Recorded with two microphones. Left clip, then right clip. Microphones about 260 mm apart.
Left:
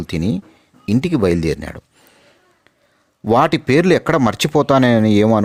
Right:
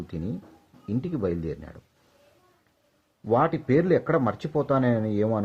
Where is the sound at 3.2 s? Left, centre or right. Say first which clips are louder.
Left 9 dB; left.